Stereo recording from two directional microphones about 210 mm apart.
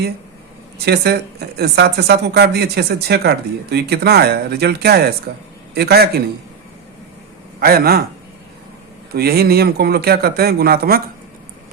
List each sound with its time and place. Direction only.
0.9 s speech: 50° right (ahead or behind)
7.6 s speech: 45° right (ahead or behind)
9.1 s speech: 50° right (ahead or behind)